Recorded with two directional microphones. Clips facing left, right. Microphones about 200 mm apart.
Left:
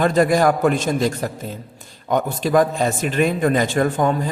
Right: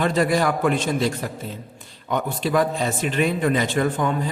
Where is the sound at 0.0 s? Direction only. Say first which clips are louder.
Left 4 dB; 45° left (ahead or behind).